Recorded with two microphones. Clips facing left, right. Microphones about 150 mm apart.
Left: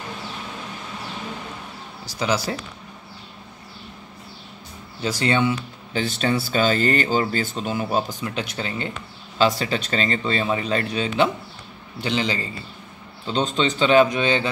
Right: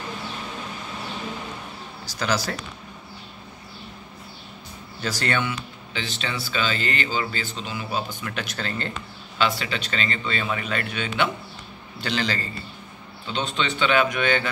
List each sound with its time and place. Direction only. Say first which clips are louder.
2.1 s speech: left 2 dB; 20° left (ahead or behind)
5.0 s speech: left 5 dB; 20° left (ahead or behind)
5.9 s speech: left 8 dB; 40° left (ahead or behind)
8.3 s speech: left 2 dB; 20° left (ahead or behind)
9.4 s speech: left 5 dB; 40° left (ahead or behind)
12.0 s speech: left 3 dB; 20° left (ahead or behind)
13.3 s speech: left 5 dB; 40° left (ahead or behind)